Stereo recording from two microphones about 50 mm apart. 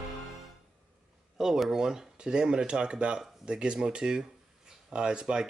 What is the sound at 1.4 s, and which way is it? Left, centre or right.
Speech, centre.